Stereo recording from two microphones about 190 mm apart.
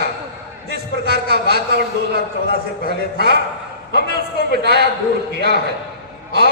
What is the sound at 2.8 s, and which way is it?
A man's voice, 55° right (ahead or behind).